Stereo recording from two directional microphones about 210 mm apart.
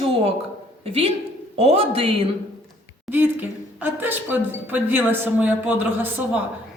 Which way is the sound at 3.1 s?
10° right (ahead or behind).